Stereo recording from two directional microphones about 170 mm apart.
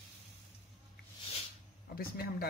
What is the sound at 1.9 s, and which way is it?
Speech, 60° left (ahead or behind).